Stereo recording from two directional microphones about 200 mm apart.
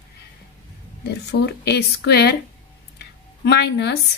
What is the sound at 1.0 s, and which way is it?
Speech, 55° left (ahead or behind).